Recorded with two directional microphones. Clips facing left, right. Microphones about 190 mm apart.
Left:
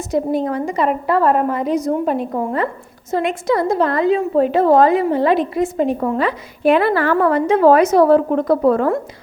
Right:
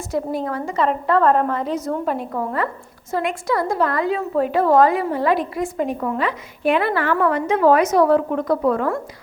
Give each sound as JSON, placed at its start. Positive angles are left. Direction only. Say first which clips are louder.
{"t": 0.1, "sound": "a woman's voice", "louder": "left 5 dB", "side_deg": 20}